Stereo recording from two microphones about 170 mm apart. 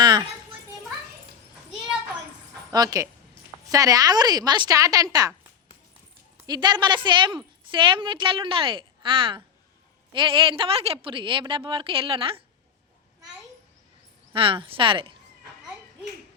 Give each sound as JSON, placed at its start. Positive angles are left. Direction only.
{"t": 0.0, "sound": "children playing", "side_deg": -25}
{"t": 2.7, "sound": "a woman's voice", "side_deg": -20}
{"t": 6.3, "sound": "a woman's voice", "side_deg": -20}
{"t": 14.3, "sound": "a woman's voice", "side_deg": -30}